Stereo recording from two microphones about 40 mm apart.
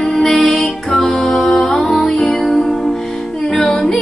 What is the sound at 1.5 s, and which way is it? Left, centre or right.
Music, left.